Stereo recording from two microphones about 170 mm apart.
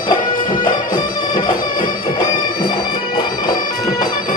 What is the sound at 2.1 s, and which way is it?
Bagpipes, 25° left (ahead or behind).